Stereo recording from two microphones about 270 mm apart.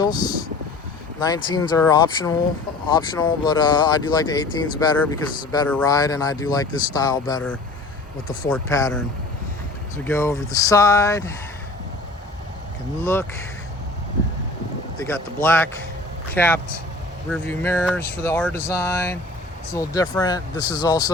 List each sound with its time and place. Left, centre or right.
0.0 s speech: centre
13.0 s speech: centre
14.9 s speech: centre